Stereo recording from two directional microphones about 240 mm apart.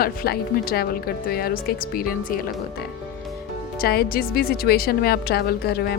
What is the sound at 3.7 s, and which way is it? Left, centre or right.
Speech, left.